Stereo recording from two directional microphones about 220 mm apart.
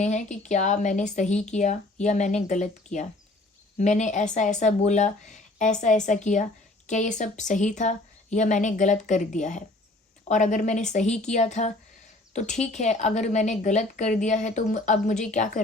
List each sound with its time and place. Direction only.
0.0 s a woman's voice: 30° left (ahead or behind)